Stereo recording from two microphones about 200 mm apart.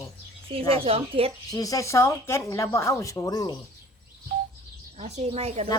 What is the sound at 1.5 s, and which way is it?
Speech, 15° left (ahead or behind).